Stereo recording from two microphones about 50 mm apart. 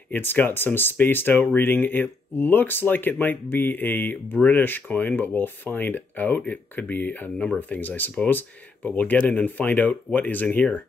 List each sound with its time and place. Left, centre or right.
0.1 s speech: left